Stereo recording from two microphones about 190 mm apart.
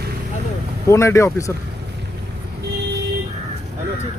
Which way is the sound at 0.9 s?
15° left (ahead or behind).